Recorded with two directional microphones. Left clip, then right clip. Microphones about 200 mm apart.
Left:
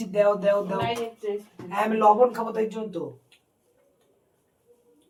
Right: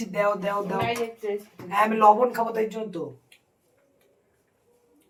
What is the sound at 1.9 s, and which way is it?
Speech, 10° left (ahead or behind).